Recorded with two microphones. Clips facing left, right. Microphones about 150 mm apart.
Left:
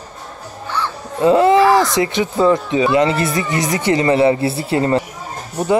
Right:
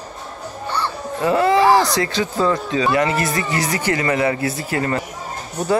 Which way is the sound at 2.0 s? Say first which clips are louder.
Left 4 dB; 20° left (ahead or behind).